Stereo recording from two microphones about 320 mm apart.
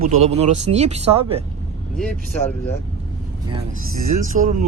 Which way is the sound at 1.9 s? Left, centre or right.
Centre.